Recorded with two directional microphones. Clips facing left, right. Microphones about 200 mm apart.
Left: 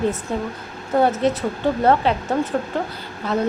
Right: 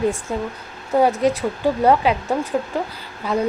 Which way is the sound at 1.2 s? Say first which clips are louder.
Right 1 dB; 10° right (ahead or behind).